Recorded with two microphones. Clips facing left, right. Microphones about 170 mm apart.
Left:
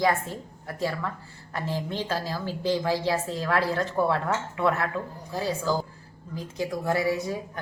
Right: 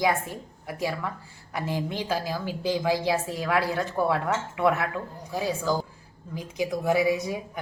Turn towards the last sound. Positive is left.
turn(degrees=-15)  # may be behind; listen again after turning